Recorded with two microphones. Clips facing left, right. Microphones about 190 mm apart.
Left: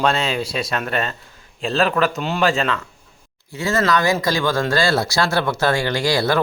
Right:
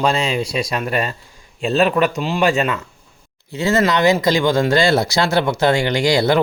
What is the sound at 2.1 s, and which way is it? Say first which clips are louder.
Speech: right 2 dB; centre (ahead or behind).